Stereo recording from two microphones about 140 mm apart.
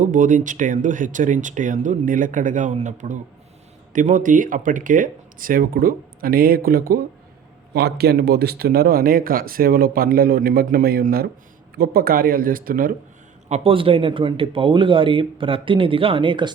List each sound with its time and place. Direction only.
0.0 s speech: 70° right (ahead or behind); by 7.0 s 90° right
8.1 s speech: 90° right
13.5 s speech: 40° right (ahead or behind)